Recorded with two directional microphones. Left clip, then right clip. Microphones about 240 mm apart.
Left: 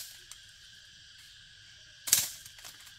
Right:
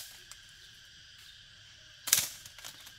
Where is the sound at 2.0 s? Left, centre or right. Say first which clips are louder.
Even; right.